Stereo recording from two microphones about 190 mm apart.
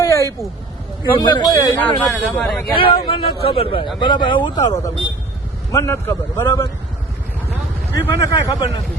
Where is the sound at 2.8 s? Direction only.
25° left (ahead or behind).